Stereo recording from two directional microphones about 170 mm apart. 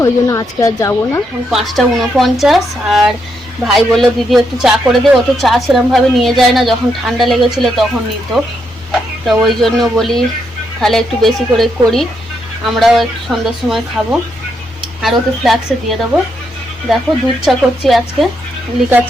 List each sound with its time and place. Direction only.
0.0 s speech: 20° left (ahead or behind)
1.5 s a man's voice: centre (ahead or behind)
8.9 s a man's voice: centre (ahead or behind)
17.4 s a man's voice: centre (ahead or behind)